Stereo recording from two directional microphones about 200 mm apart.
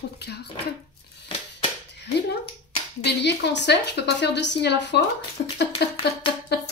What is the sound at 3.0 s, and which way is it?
A woman's voice, 60° left (ahead or behind).